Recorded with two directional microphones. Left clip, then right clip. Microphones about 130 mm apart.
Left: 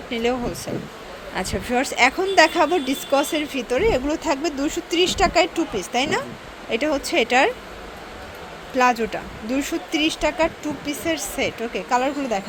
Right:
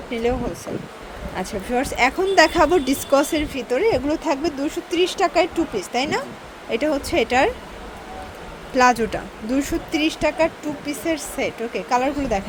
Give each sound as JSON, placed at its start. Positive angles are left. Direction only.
{"t": 0.1, "sound": "speech", "side_deg": -5}
{"t": 1.4, "sound": "speech", "side_deg": 5}
{"t": 2.3, "sound": "speech", "side_deg": -15}
{"t": 2.6, "sound": "speech", "side_deg": -30}
{"t": 3.5, "sound": "speech", "side_deg": -10}
{"t": 8.7, "sound": "speech", "side_deg": -25}